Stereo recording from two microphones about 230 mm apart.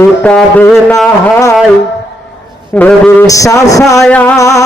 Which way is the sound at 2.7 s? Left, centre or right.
Centre.